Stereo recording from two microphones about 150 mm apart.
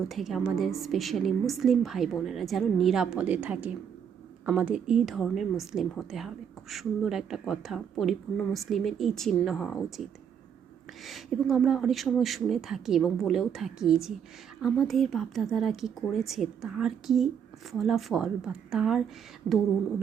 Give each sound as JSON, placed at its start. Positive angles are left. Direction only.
{"t": 0.1, "sound": "a woman's voice", "side_deg": 0}